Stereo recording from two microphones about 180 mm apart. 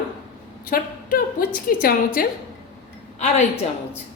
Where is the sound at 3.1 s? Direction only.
40° left (ahead or behind).